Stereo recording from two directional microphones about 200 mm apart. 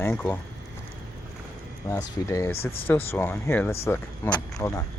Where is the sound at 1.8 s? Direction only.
15° left (ahead or behind).